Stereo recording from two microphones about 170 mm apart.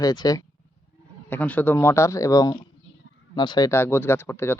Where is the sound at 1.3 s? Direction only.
10° left (ahead or behind); by 3.6 s 25° left (ahead or behind).